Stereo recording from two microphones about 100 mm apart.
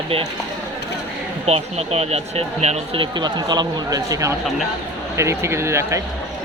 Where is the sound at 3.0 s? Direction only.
45° right (ahead or behind); by 6.0 s 30° right (ahead or behind).